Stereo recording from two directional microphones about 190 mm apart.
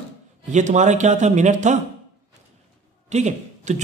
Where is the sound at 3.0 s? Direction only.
35° right (ahead or behind).